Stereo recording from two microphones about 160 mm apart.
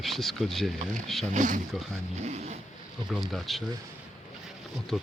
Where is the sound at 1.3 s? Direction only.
50° right (ahead or behind).